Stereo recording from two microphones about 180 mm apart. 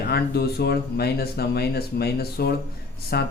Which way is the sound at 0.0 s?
60° left (ahead or behind).